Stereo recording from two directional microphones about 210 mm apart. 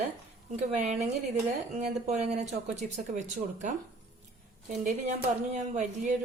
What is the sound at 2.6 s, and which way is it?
Speech, 35° right (ahead or behind).